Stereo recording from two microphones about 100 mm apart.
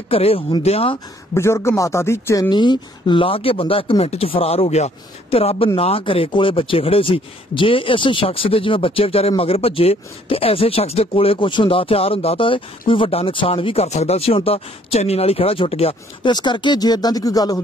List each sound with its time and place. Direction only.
0.1 s speech: 75° left (ahead or behind)
0.6 s speech: 90° left
1.3 s speech: 30° left (ahead or behind)
2.5 s speech: 50° left (ahead or behind); by 5.7 s 85° left
5.8 s speech: 70° left (ahead or behind)
16.3 s speech: 50° left (ahead or behind)